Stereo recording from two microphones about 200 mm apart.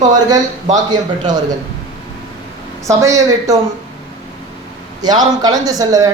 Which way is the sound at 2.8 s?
15° right (ahead or behind).